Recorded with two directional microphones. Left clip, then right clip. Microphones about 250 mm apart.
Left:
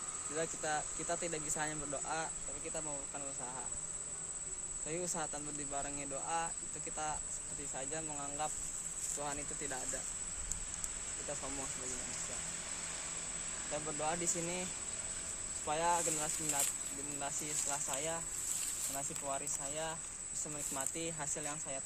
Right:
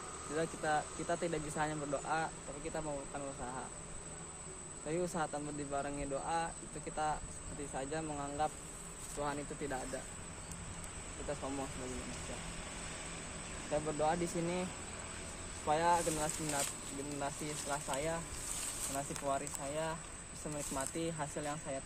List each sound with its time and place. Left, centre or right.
0.3 s cricket: centre
4.9 s speech: centre
14.0 s speech: centre
15.6 s speech: centre